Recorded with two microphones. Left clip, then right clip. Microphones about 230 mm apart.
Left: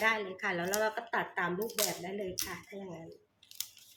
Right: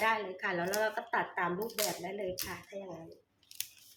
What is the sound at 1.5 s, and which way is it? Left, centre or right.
Speech, centre.